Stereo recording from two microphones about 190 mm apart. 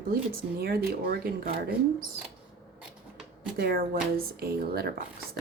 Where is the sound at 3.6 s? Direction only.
55° right (ahead or behind).